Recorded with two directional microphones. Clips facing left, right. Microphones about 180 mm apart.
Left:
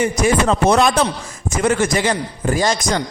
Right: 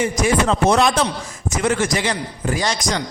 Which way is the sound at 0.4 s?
50° left (ahead or behind).